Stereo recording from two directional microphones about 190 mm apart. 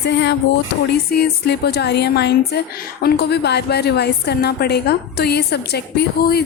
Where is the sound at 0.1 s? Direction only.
65° left (ahead or behind).